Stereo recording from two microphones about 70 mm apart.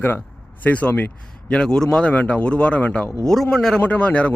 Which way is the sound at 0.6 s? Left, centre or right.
Centre.